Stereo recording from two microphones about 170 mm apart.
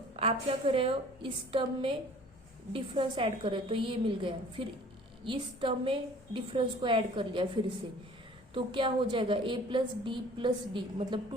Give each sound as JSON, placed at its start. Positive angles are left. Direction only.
{"t": 0.2, "sound": "a woman's voice", "side_deg": -35}